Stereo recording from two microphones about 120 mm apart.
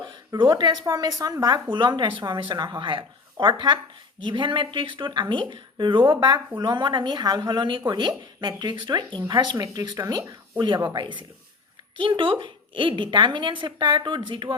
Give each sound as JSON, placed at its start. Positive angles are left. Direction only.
{"t": 0.3, "sound": "a woman's voice", "side_deg": -35}